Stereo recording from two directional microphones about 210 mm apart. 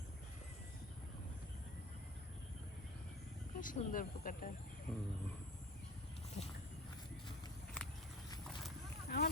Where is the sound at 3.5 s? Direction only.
40° left (ahead or behind).